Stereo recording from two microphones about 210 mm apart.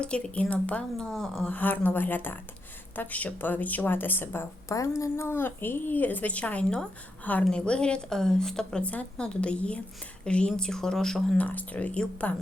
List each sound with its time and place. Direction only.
0.0 s a woman's voice: 5° left (ahead or behind)